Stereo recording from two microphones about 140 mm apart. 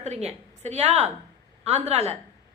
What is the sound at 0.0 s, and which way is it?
A woman's voice, 50° right (ahead or behind).